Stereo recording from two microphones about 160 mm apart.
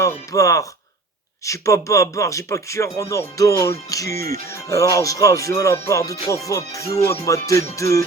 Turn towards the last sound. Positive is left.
turn(degrees=20)  # may be behind; listen again after turning